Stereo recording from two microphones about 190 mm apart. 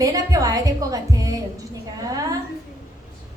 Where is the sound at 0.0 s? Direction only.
20° right (ahead or behind).